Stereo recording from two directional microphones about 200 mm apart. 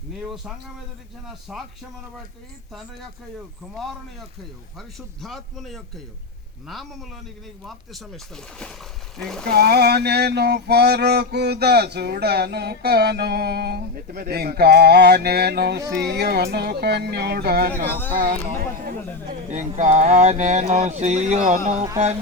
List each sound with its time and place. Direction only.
1.3 s speech: centre (ahead or behind)
4.9 s speech: centre (ahead or behind)
7.6 s speech: centre (ahead or behind)
9.5 s male singing: 55° right (ahead or behind)
15.8 s speech: 15° right (ahead or behind)
16.0 s male singing: 55° right (ahead or behind)
18.1 s speech: 45° right (ahead or behind)